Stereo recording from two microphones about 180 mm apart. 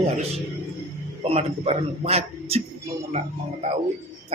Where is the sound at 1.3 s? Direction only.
35° right (ahead or behind).